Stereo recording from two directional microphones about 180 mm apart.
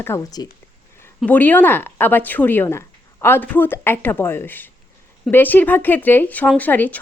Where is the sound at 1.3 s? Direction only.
10° left (ahead or behind).